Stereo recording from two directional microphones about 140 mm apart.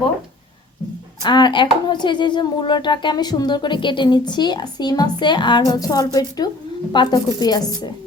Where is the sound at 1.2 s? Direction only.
30° left (ahead or behind).